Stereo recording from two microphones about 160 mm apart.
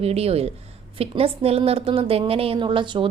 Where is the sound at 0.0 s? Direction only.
40° right (ahead or behind).